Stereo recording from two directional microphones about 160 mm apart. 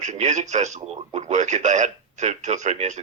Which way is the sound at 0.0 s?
45° right (ahead or behind).